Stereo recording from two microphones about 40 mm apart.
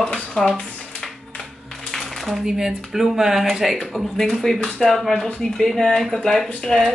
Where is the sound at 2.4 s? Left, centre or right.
Centre.